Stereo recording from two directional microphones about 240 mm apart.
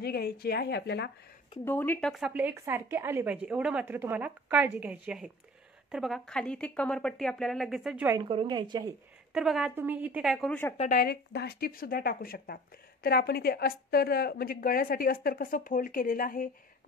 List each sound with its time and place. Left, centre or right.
0.0 s a woman's voice: left
1.6 s a woman's voice: centre
8.3 s a woman's voice: centre
9.3 s a woman's voice: centre
10.8 s a woman's voice: left